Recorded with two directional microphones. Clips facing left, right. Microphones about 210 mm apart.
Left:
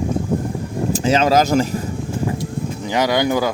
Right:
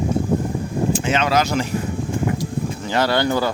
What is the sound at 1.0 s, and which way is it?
Speech, 35° left (ahead or behind).